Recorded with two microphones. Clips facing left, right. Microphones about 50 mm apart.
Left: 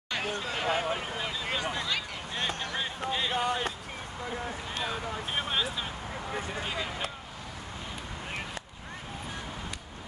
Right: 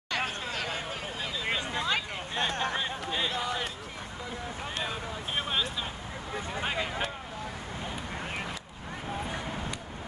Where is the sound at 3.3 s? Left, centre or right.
Left.